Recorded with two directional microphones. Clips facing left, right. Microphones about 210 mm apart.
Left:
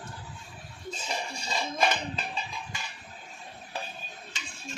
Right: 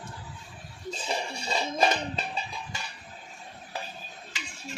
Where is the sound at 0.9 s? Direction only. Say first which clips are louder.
Right 3 dB; 35° right (ahead or behind).